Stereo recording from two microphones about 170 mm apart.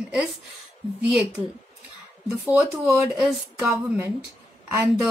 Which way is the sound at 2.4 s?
5° right (ahead or behind).